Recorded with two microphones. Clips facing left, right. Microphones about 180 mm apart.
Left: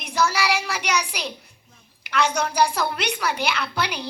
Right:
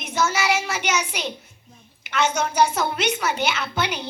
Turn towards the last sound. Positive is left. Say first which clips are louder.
# right 1 dB
turn(degrees=0)  # may be behind; listen again after turning